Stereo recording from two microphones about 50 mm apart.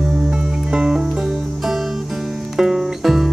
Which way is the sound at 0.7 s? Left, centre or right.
Centre.